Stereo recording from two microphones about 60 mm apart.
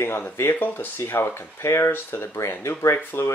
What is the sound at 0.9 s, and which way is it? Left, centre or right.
Speech, left.